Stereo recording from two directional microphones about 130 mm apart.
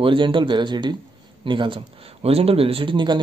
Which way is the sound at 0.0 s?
40° right (ahead or behind).